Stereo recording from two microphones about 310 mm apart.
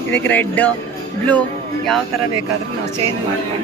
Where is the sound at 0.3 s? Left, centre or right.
Centre.